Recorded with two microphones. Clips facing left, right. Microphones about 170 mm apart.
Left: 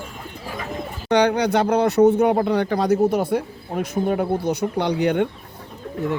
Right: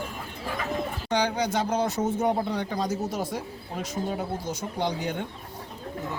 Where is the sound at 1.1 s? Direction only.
65° left (ahead or behind).